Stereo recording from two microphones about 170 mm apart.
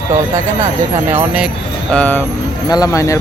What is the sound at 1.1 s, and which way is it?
Speech, 5° right (ahead or behind).